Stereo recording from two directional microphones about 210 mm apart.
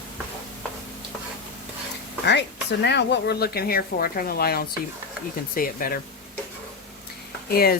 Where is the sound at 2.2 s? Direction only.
55° left (ahead or behind).